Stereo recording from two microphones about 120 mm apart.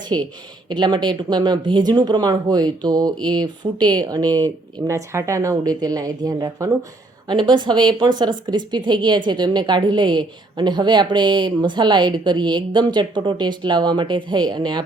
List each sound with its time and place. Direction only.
0.0 s a woman's voice: 35° right (ahead or behind)
7.3 s a woman's voice: 40° right (ahead or behind)